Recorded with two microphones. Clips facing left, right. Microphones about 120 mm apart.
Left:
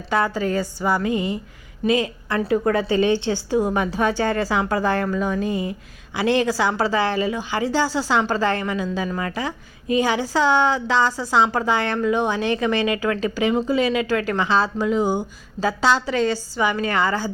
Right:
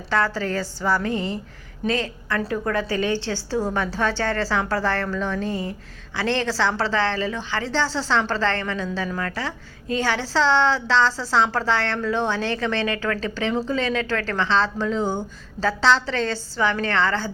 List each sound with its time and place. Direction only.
0.1 s a woman's voice: 15° left (ahead or behind)